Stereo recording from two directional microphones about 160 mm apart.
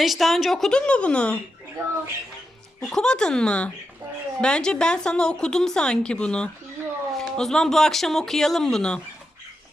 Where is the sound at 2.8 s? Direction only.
5° left (ahead or behind).